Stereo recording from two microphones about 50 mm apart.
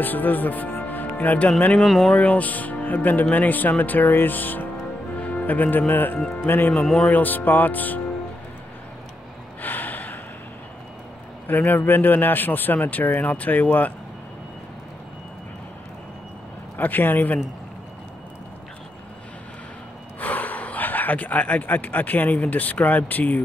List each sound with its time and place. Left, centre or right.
0.0 s speech: left
1.8 s speech: centre
2.1 s speech: left
9.6 s gasp: left
11.4 s speech: left
16.7 s speech: left
20.2 s speech: left